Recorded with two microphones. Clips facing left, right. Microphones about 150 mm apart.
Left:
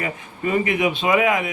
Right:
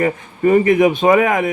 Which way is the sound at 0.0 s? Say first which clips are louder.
Right 10 dB; 45° right (ahead or behind).